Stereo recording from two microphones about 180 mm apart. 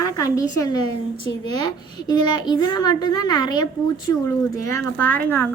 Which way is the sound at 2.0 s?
25° left (ahead or behind).